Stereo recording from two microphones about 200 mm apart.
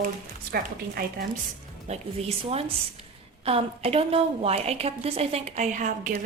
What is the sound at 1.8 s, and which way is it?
Speech, 30° right (ahead or behind).